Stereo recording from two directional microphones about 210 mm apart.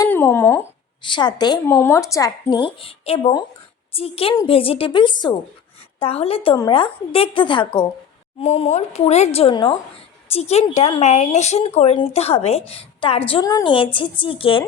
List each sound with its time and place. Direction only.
0.0 s speech: 10° left (ahead or behind)
1.0 s speech: 20° left (ahead or behind)